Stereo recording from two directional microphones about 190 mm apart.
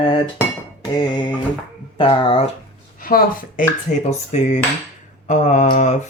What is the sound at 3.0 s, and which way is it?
Speech, 50° left (ahead or behind).